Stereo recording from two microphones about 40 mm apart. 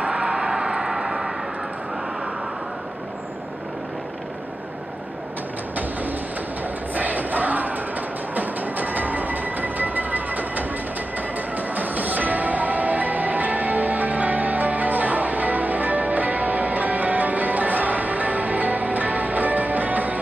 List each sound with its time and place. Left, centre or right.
0.0 s a sound: right; by 1.3 s centre
6.9 s music: right
8.4 s train: right
11.5 s music: right